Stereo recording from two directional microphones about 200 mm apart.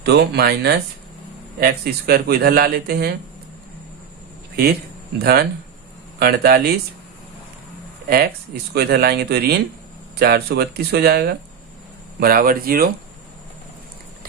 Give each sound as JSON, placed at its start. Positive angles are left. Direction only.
{"t": 0.0, "sound": "speech", "side_deg": -55}
{"t": 5.2, "sound": "speech", "side_deg": -50}
{"t": 8.0, "sound": "speech", "side_deg": -50}